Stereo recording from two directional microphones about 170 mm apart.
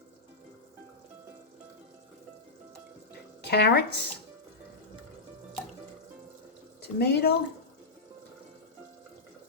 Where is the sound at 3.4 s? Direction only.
75° left (ahead or behind).